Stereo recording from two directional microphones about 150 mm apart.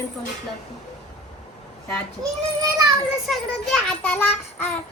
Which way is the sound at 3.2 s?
Centre (ahead or behind).